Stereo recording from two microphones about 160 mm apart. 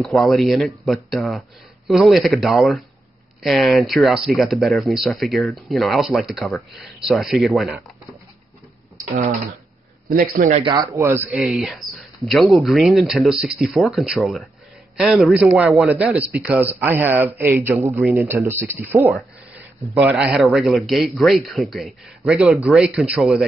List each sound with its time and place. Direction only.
0.0 s speech: centre (ahead or behind)
10.0 s a man's voice: 55° right (ahead or behind)
10.6 s speech: 25° right (ahead or behind)
11.0 s speech: 15° right (ahead or behind)
11.3 s speech: centre (ahead or behind)